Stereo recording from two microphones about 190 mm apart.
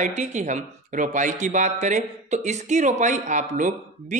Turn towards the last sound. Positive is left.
turn(degrees=-40)  # may be behind; listen again after turning